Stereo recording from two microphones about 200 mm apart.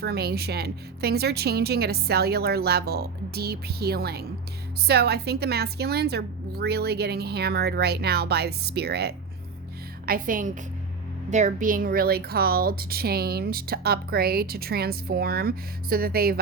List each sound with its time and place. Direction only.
0.0 s a woman's voice: 50° right (ahead or behind)
10.1 s a woman's voice: 45° right (ahead or behind)